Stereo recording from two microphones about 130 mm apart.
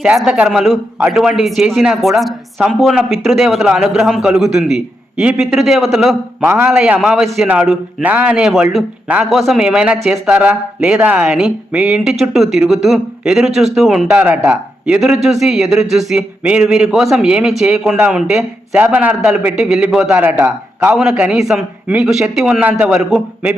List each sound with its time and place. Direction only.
0.0 s speech: 10° right (ahead or behind)
6.4 s speech: 15° right (ahead or behind)